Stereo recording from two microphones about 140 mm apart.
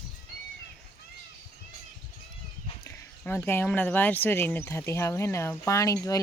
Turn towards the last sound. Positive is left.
turn(degrees=25)  # may be behind; listen again after turning